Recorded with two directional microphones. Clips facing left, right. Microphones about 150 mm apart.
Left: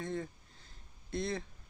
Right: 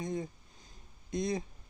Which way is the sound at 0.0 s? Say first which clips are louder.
Right 2 dB; 15° right (ahead or behind).